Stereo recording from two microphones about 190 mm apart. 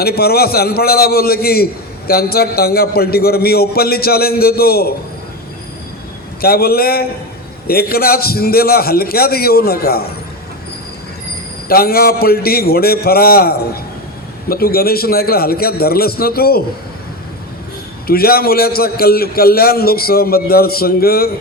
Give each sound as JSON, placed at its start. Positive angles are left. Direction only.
{"t": 0.0, "sound": "a man's voice", "side_deg": 55}
{"t": 6.4, "sound": "a man's voice", "side_deg": 55}
{"t": 11.7, "sound": "a man's voice", "side_deg": 50}
{"t": 18.1, "sound": "a man's voice", "side_deg": 55}